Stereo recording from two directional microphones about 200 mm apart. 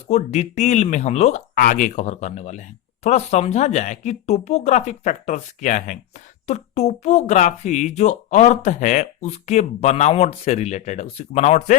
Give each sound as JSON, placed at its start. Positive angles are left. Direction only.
{"t": 0.1, "sound": "speech", "side_deg": 35}